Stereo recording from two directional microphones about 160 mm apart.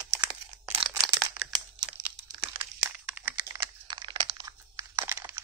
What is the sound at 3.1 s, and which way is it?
Computer keyboard, 10° right (ahead or behind).